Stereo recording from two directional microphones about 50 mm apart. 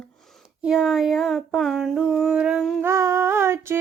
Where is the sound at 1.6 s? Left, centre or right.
Centre.